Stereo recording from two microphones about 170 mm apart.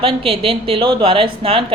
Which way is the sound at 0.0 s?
35° right (ahead or behind).